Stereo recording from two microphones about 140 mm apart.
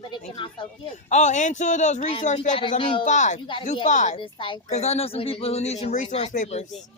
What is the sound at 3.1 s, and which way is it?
Speech, 60° left (ahead or behind).